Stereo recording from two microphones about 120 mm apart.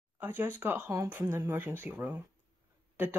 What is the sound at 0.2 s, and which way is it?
Speech, 15° right (ahead or behind).